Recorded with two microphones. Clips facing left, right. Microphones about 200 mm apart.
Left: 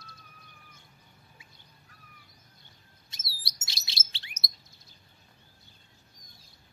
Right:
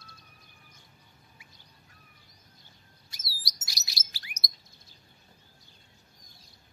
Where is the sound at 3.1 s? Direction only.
25° left (ahead or behind).